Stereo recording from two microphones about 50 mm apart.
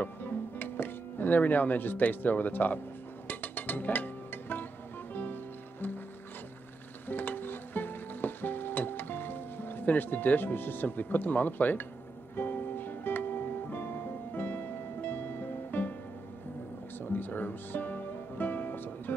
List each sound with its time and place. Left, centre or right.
0.6 s speech: left
3.3 s music: left
7.1 s music: left
17.0 s music: left